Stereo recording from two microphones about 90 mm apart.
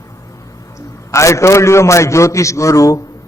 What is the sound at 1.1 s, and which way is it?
A man's voice, 35° left (ahead or behind).